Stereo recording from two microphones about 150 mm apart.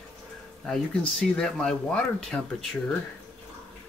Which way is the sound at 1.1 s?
5° left (ahead or behind).